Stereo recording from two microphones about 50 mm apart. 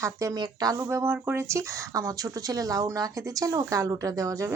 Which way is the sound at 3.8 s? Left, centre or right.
Right.